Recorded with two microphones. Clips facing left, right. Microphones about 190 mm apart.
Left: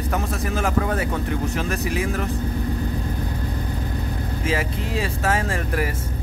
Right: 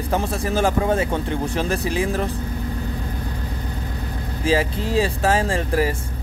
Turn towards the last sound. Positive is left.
turn(degrees=-30)  # may be behind; listen again after turning